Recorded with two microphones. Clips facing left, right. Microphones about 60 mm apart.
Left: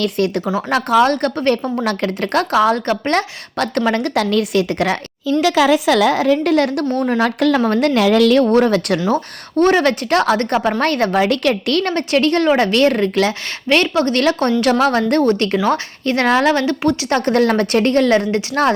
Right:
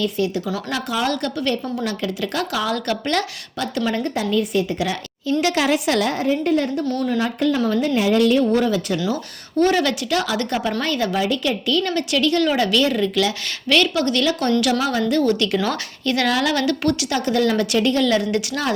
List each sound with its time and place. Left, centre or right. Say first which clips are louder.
0.0 s speech: left 4 dB; left
0.7 s speech: left 10 dB; left
3.6 s a woman's voice: left 5 dB; left
6.1 s a woman's voice: left 5 dB; left
7.0 s a woman's voice: left 6 dB; left
9.0 s speech: left 6 dB; left
15.5 s speech: left 5 dB; left
17.1 s speech: left 6 dB; left